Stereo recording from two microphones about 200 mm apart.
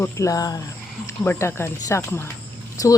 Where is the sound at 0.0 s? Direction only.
15° left (ahead or behind).